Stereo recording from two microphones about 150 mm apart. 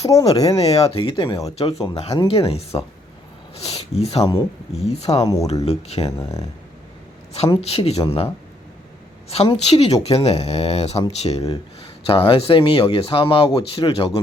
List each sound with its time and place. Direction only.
0.0 s speech: 20° left (ahead or behind)
0.7 s speech: 40° left (ahead or behind)
4.2 s speech: 25° left (ahead or behind)
4.8 s speech: 45° left (ahead or behind)
5.2 s speech: 20° left (ahead or behind)
5.6 s speech: 45° left (ahead or behind)
6.1 s speech: 20° left (ahead or behind)
7.5 s speech: 40° left (ahead or behind)
9.3 s speech: 40° left (ahead or behind)